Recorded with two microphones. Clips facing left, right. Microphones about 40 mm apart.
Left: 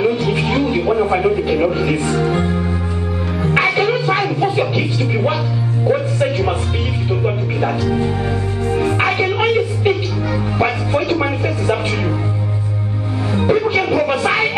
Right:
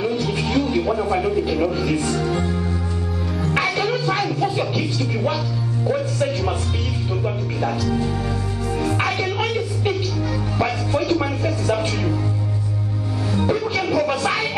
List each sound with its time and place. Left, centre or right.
0.0 s music: left
5.9 s speech: left
7.2 s music: left
13.3 s music: left